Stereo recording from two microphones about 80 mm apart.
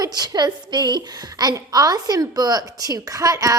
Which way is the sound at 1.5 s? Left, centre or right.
Right.